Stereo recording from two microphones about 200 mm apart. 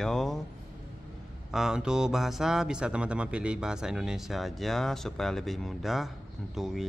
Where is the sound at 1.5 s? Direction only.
5° right (ahead or behind).